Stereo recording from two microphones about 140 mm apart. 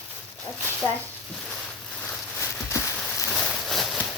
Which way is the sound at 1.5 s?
10° left (ahead or behind).